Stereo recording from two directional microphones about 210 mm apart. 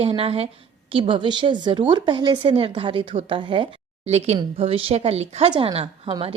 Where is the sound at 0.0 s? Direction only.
25° right (ahead or behind).